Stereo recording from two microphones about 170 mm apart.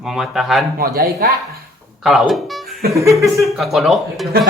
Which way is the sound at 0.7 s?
60° right (ahead or behind).